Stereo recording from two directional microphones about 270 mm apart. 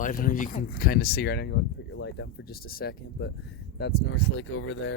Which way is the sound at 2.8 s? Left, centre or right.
Left.